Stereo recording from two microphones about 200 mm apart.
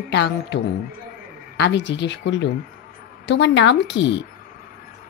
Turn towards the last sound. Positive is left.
turn(degrees=65)  # may be behind; listen again after turning